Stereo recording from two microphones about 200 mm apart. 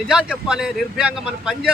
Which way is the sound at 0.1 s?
5° right (ahead or behind).